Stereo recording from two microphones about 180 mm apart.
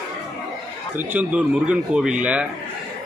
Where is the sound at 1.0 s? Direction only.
10° right (ahead or behind).